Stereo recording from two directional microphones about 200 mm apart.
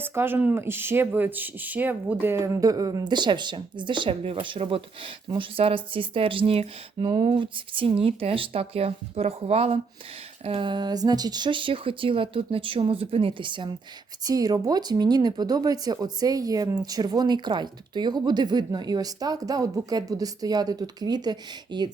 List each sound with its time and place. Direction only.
0.0 s speech: 10° right (ahead or behind)